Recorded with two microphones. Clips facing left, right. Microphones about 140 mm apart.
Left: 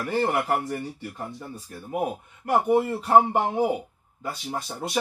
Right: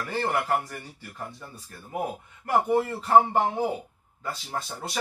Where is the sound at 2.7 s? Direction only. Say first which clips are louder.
Left 1 dB; 15° left (ahead or behind).